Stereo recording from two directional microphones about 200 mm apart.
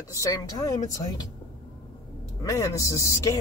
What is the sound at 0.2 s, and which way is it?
Speech, 15° left (ahead or behind).